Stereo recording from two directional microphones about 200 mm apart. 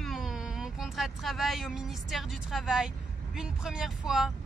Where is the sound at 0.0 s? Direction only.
Centre (ahead or behind).